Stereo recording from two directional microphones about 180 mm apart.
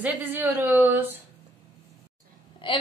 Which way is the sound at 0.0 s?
10° right (ahead or behind).